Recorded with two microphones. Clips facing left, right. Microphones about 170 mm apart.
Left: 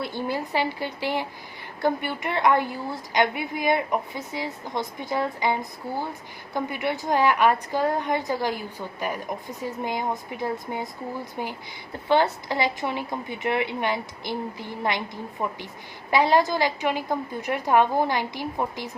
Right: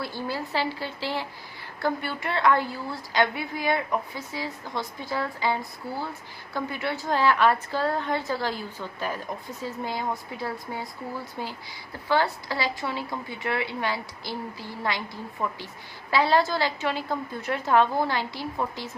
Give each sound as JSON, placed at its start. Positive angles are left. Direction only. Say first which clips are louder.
{"t": 0.0, "sound": "a woman's voice", "louder": "left 3 dB", "side_deg": 20}